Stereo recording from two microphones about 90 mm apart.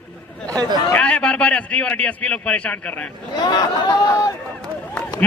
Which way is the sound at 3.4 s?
50° left (ahead or behind).